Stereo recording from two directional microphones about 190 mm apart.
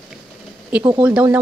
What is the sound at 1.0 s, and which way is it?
Speech, 5° right (ahead or behind).